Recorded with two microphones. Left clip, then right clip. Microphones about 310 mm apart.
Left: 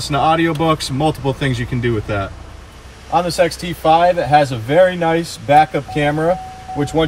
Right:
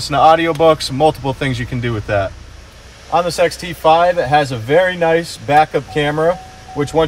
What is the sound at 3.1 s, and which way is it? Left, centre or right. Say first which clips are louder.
Speech: right 1 dB; centre.